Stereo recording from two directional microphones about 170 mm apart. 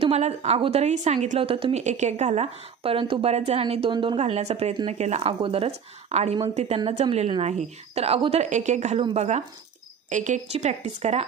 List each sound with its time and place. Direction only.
0.0 s a woman's voice: 40° right (ahead or behind)